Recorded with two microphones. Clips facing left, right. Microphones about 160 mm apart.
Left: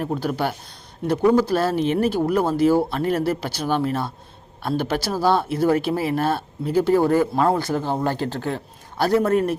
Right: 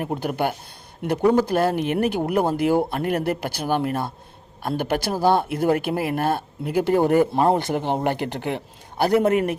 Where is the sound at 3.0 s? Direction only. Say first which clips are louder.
Left 1 dB; 55° right (ahead or behind).